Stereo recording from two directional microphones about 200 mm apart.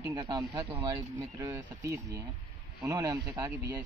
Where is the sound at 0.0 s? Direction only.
20° right (ahead or behind).